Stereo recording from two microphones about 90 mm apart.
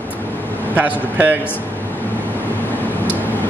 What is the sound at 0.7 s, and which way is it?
Speech, 20° right (ahead or behind).